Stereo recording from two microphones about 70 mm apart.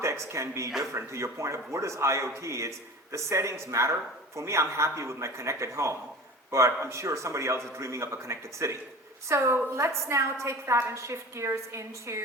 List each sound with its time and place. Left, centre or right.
0.0 s a man's voice: right